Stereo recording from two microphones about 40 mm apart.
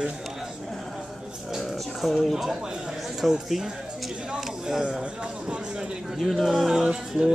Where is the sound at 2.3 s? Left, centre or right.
Centre.